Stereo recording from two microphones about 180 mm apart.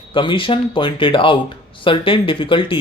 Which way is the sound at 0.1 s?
30° left (ahead or behind).